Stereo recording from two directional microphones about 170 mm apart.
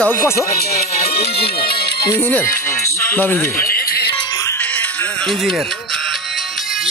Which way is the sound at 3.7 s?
60° left (ahead or behind).